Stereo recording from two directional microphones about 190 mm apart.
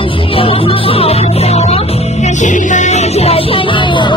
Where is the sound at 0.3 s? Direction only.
30° left (ahead or behind).